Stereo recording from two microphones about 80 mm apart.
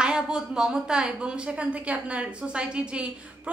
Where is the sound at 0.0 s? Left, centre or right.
Centre.